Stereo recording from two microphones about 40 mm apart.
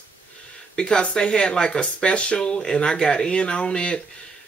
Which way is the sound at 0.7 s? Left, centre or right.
Left.